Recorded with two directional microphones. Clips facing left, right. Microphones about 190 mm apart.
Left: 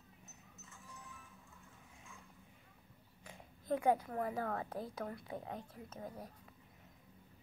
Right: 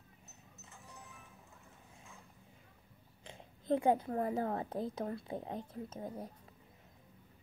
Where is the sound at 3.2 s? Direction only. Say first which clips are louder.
Right 2 dB; 25° right (ahead or behind).